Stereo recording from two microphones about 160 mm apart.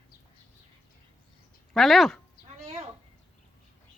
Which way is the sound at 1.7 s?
Centre (ahead or behind).